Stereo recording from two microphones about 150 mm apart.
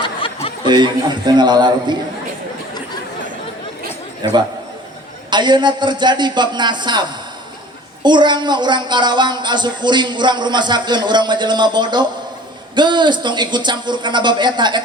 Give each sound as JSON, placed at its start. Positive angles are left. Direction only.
{"t": 0.6, "sound": "a man's voice", "side_deg": -30}
{"t": 4.2, "sound": "a man's voice", "side_deg": -30}